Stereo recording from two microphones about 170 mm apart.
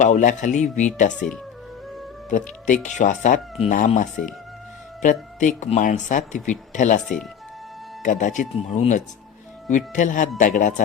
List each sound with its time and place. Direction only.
0.0 s a man's voice: 45° left (ahead or behind)
1.1 s speech: 5° left (ahead or behind)
2.6 s a man's voice: 45° left (ahead or behind)
7.0 s speech: 5° left (ahead or behind)
8.0 s a man's voice: 45° left (ahead or behind)